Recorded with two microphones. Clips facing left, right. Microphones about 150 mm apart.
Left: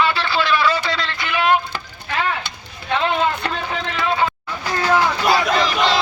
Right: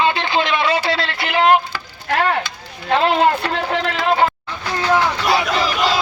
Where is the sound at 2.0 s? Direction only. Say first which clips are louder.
Right 5 dB; 55° right (ahead or behind).